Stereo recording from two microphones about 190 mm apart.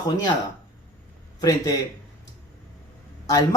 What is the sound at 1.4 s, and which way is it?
Speech, 20° left (ahead or behind).